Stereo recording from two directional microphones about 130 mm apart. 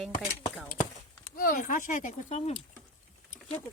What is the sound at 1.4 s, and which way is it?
Speech, 90° left.